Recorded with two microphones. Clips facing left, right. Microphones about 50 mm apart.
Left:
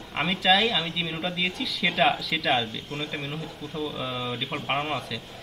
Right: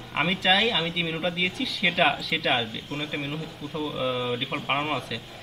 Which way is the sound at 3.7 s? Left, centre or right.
Centre.